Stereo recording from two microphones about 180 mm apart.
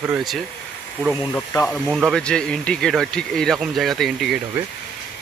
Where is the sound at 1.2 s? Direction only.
15° left (ahead or behind).